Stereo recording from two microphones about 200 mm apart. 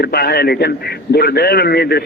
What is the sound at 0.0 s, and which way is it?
A man's voice, 55° left (ahead or behind).